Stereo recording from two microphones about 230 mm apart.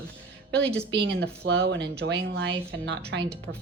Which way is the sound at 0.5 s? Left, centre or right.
Centre.